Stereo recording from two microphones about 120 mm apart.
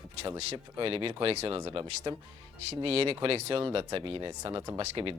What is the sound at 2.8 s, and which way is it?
Speech, 55° right (ahead or behind).